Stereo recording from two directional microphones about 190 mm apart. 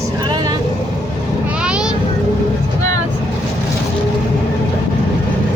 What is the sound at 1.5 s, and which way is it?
Vehicle, 5° right (ahead or behind).